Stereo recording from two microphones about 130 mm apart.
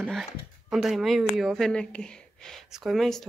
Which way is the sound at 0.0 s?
Centre (ahead or behind).